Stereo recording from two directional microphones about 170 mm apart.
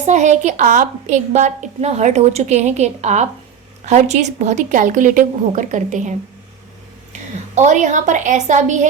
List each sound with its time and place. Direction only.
0.0 s a woman's voice: 45° right (ahead or behind)